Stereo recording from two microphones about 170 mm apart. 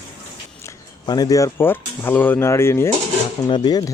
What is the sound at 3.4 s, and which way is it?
Speech, 30° left (ahead or behind).